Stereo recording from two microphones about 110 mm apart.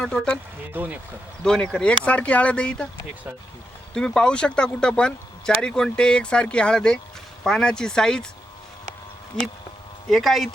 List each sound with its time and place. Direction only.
0.0 s speech: 5° left (ahead or behind)
0.7 s speech: 15° right (ahead or behind)
1.5 s speech: 5° left (ahead or behind)
3.9 s speech: 5° left (ahead or behind)
9.3 s speech: 5° left (ahead or behind)